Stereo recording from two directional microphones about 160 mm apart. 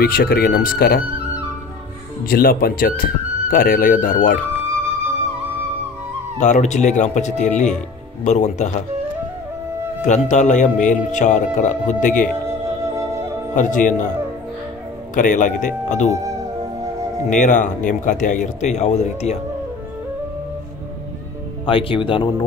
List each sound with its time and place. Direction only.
0.0 s speech: 70° left (ahead or behind)
2.2 s speech: 70° left (ahead or behind)
6.4 s speech: 50° left (ahead or behind)
10.0 s speech: 50° left (ahead or behind)
12.4 s music: 15° right (ahead or behind)
13.6 s speech: 55° left (ahead or behind)
15.1 s speech: 55° left (ahead or behind)
17.3 s speech: 50° left (ahead or behind)
21.6 s speech: 35° left (ahead or behind)